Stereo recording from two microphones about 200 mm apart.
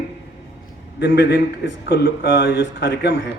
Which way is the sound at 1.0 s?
55° left (ahead or behind).